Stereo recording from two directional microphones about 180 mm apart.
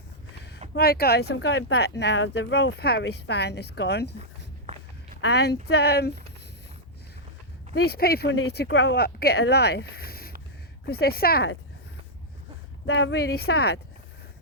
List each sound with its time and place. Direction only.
0.7 s speech: 60° left (ahead or behind)
5.3 s speech: 65° left (ahead or behind)
7.7 s speech: 60° left (ahead or behind)
12.8 s speech: 80° left; by 13.7 s 60° left (ahead or behind)